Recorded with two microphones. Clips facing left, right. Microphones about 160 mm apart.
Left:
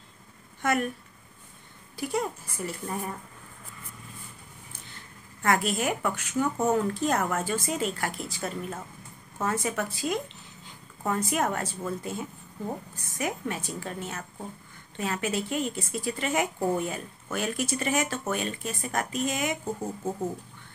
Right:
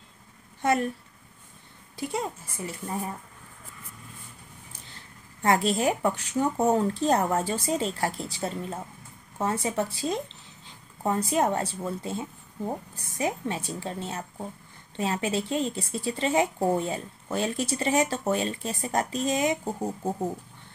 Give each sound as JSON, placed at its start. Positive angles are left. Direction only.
{"t": 0.6, "sound": "speech", "side_deg": -30}
{"t": 2.0, "sound": "speech", "side_deg": -25}
{"t": 4.9, "sound": "a woman's voice", "side_deg": -30}
{"t": 20.0, "sound": "speech", "side_deg": -15}